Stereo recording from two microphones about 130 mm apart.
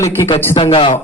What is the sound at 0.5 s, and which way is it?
Speech, 40° left (ahead or behind).